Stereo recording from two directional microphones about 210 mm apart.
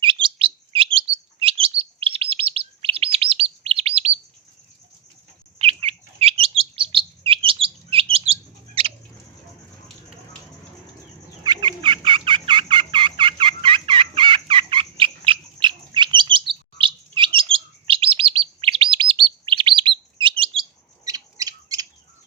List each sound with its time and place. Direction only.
0.0 s chirp: 25° right (ahead or behind)
5.5 s chirp: 30° right (ahead or behind)
11.4 s fowl: 20° right (ahead or behind)